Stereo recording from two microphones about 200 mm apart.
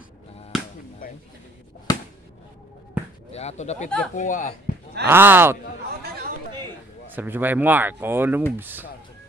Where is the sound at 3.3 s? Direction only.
35° left (ahead or behind).